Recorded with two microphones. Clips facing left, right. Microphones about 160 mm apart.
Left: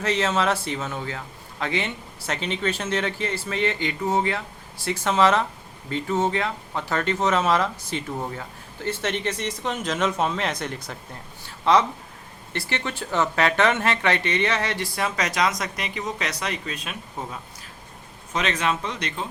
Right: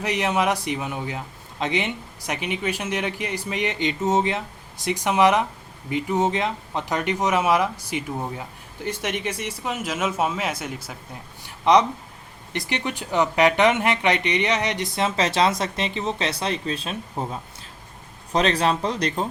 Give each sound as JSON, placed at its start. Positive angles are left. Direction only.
{"t": 0.0, "sound": "a man's voice", "side_deg": -15}
{"t": 11.4, "sound": "a sound", "side_deg": -15}
{"t": 12.5, "sound": "speech", "side_deg": -15}
{"t": 18.3, "sound": "speech", "side_deg": -35}